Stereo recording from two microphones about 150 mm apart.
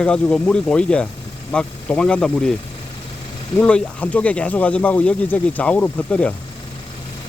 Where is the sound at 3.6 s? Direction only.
10° left (ahead or behind).